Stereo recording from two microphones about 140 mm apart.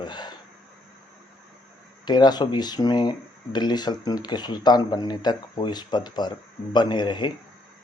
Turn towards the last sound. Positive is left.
turn(degrees=35)  # may be behind; listen again after turning